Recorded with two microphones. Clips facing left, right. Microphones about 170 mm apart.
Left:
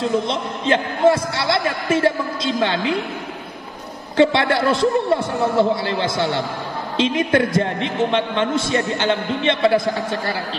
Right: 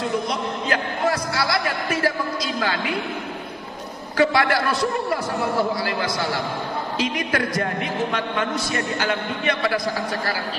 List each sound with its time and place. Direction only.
0.3 s a man's voice: 25° left (ahead or behind)
4.2 s a man's voice: 25° left (ahead or behind)